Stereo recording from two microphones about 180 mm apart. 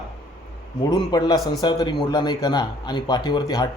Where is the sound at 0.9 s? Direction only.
20° left (ahead or behind).